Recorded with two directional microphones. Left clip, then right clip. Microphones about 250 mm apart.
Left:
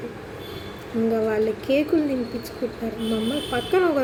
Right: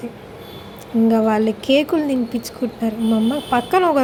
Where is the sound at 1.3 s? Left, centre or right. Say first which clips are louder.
Right 5 dB; right.